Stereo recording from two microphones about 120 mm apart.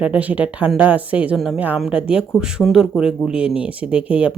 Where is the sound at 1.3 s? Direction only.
Centre (ahead or behind).